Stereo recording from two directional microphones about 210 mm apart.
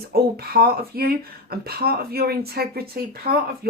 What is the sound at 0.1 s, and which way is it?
Speech, 45° right (ahead or behind).